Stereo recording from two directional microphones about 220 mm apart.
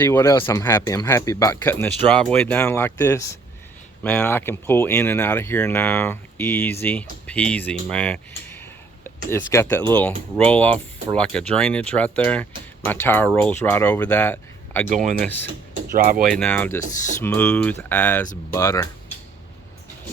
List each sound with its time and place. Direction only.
0.0 s speech: 10° left (ahead or behind)
14.8 s speech: 35° right (ahead or behind)
15.2 s speech: 10° left (ahead or behind)
15.9 s speech: 40° right (ahead or behind)
16.2 s speech: 5° left (ahead or behind)